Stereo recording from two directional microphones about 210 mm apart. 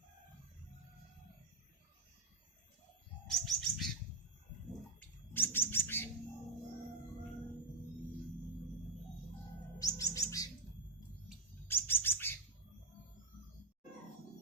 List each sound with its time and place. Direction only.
3.2 s bird: centre (ahead or behind)
4.9 s bird: 10° left (ahead or behind)
9.7 s bird: 15° left (ahead or behind)
11.7 s bird: 10° left (ahead or behind)